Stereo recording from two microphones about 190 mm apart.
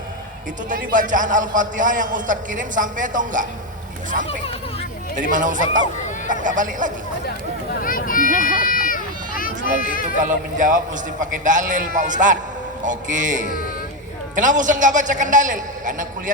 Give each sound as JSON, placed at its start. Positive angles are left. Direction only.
{"t": 0.7, "sound": "a man's voice", "side_deg": -45}
{"t": 4.3, "sound": "speech", "side_deg": 30}
{"t": 5.1, "sound": "a man's voice", "side_deg": -45}
{"t": 7.8, "sound": "a sound", "side_deg": 45}
{"t": 9.6, "sound": "speech", "side_deg": 45}
{"t": 10.2, "sound": "a man's voice", "side_deg": -45}